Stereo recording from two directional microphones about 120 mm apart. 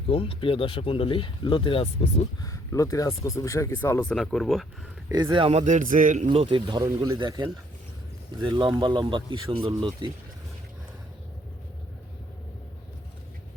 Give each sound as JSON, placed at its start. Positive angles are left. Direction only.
{"t": 0.1, "sound": "speech", "side_deg": 50}
{"t": 2.4, "sound": "speech", "side_deg": 25}
{"t": 4.1, "sound": "speech", "side_deg": 5}
{"t": 5.3, "sound": "speech", "side_deg": -45}
{"t": 5.5, "sound": "a man's voice", "side_deg": -90}
{"t": 6.3, "sound": "speech", "side_deg": -50}
{"t": 6.8, "sound": "speech", "side_deg": -25}
{"t": 7.2, "sound": "speech", "side_deg": -35}